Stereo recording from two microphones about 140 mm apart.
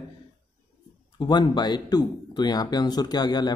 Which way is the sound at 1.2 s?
30° left (ahead or behind).